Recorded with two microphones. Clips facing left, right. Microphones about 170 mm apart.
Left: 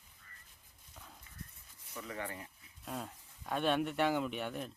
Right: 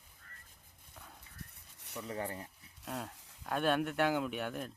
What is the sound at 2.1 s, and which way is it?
Speech, 35° right (ahead or behind).